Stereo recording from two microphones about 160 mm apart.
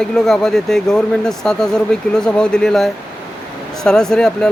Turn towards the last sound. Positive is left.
turn(degrees=5)  # may be behind; listen again after turning